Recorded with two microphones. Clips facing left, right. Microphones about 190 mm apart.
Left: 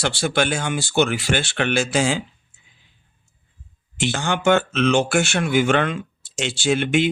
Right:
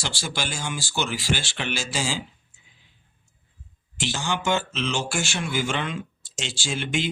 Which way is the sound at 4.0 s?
55° left (ahead or behind).